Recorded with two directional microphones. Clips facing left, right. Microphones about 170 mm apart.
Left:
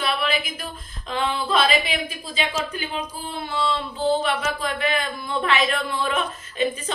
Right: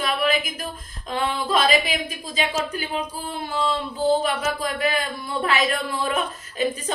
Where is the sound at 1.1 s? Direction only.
40° right (ahead or behind).